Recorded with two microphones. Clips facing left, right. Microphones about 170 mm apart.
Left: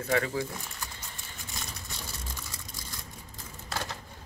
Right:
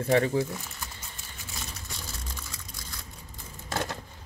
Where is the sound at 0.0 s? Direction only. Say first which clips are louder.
Right 5 dB; 25° right (ahead or behind).